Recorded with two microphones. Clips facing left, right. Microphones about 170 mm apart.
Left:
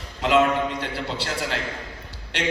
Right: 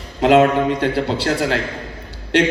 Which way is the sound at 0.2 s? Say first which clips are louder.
Right 7 dB; 45° right (ahead or behind).